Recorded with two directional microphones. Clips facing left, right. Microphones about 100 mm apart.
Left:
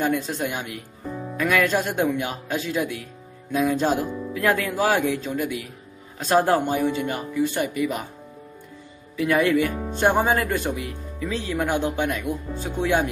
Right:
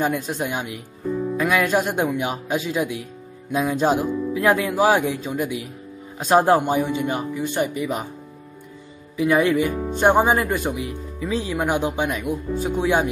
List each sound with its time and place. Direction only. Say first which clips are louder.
0.1 s speech: even; 15° right (ahead or behind)
9.1 s speech: right 2 dB; 15° right (ahead or behind)